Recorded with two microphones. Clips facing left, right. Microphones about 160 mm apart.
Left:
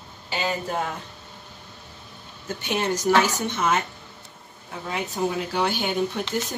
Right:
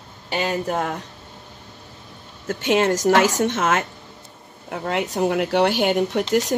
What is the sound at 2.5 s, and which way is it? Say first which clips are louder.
A woman's voice: right 7 dB; 90° right.